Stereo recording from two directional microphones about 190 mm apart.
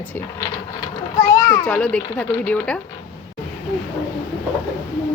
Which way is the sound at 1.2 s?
15° left (ahead or behind).